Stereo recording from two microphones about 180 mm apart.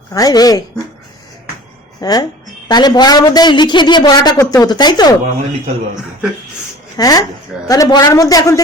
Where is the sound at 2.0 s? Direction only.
20° left (ahead or behind).